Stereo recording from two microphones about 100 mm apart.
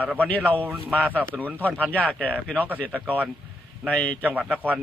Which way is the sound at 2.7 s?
15° left (ahead or behind).